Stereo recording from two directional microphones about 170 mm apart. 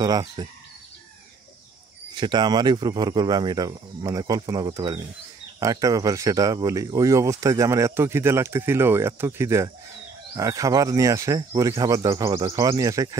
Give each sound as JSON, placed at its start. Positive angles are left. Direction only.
{"t": 0.0, "sound": "speech", "side_deg": -25}
{"t": 2.1, "sound": "speech", "side_deg": -25}